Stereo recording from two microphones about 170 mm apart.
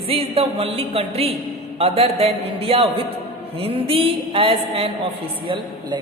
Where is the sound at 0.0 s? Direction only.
35° right (ahead or behind).